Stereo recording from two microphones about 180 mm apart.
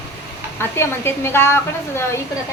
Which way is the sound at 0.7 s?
15° left (ahead or behind).